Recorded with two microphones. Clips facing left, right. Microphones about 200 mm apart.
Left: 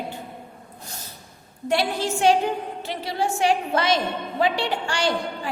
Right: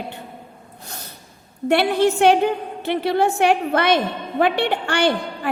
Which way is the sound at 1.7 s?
60° right (ahead or behind).